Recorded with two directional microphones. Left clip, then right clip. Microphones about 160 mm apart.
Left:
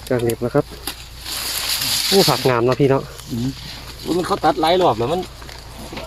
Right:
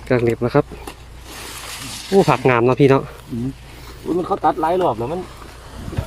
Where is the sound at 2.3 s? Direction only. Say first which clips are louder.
Right 2 dB; 30° right (ahead or behind).